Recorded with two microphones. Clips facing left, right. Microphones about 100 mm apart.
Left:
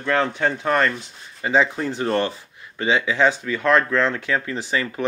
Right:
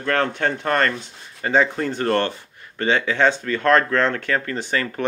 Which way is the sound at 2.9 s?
55° right (ahead or behind).